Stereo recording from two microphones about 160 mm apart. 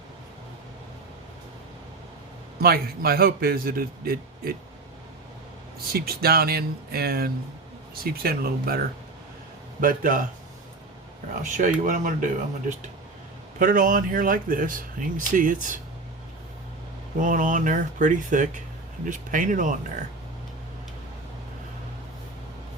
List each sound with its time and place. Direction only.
2.6 s a man's voice: 70° right (ahead or behind)
5.9 s a man's voice: 70° right (ahead or behind)
9.8 s speech: 60° right (ahead or behind)
11.4 s speech: 50° right (ahead or behind)
17.2 s speech: 55° right (ahead or behind)